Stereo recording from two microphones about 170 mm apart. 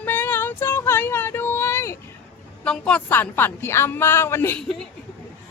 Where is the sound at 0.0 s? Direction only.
10° left (ahead or behind).